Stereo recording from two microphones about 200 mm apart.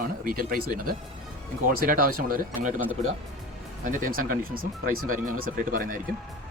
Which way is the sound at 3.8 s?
45° right (ahead or behind).